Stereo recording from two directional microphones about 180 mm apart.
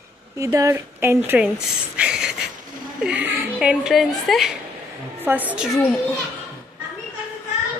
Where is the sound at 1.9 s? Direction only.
5° right (ahead or behind).